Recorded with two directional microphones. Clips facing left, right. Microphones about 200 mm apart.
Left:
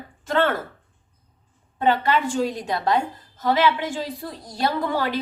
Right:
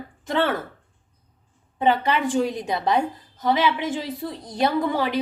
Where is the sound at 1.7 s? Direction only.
15° right (ahead or behind).